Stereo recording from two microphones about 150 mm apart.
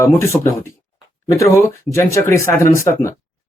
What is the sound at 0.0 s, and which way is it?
Speech, 20° left (ahead or behind).